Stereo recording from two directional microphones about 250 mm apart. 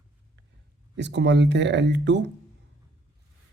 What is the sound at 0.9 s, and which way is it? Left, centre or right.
A man's voice, right.